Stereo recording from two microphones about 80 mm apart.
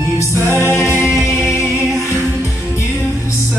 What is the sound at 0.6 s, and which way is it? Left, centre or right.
Music, left.